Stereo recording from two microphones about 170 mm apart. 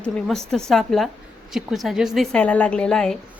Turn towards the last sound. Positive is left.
turn(degrees=5)  # may be behind; listen again after turning